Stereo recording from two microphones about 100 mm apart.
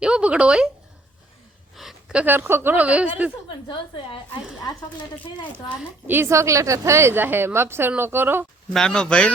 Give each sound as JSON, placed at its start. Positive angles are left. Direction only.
{"t": 0.0, "sound": "a woman's voice", "side_deg": -10}
{"t": 1.7, "sound": "a sound", "side_deg": 0}
{"t": 2.2, "sound": "a woman's voice", "side_deg": -25}
{"t": 6.1, "sound": "a woman's voice", "side_deg": -25}
{"t": 8.7, "sound": "speech", "side_deg": 5}